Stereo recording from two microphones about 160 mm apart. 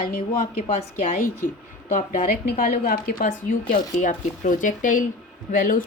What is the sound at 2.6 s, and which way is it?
A woman's voice, 65° left (ahead or behind).